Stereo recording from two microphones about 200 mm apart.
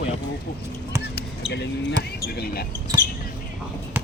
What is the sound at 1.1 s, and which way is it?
Basketball bounce, 60° left (ahead or behind).